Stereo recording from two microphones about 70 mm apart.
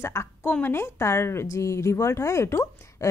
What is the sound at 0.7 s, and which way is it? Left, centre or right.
A woman's voice, left.